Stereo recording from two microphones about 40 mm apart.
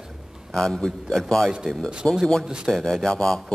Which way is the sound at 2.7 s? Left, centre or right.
Centre.